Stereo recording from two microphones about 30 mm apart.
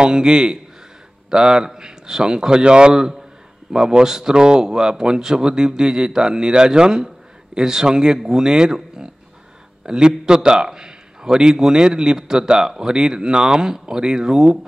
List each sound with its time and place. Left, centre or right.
0.0 s a man's voice: right
2.9 s a man's voice: centre
4.4 s a man's voice: right; by 12.8 s centre
12.8 s a man's voice: right